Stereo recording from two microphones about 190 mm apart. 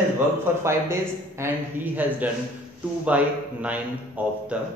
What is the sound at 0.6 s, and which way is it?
Speech, 15° right (ahead or behind).